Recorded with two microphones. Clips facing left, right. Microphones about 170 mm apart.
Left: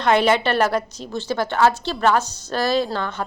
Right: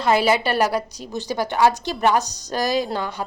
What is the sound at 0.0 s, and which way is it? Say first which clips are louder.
A woman's voice: left 1 dB; 5° right (ahead or behind).